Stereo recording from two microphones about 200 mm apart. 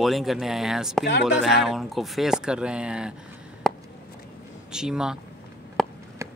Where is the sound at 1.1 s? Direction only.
60° left (ahead or behind).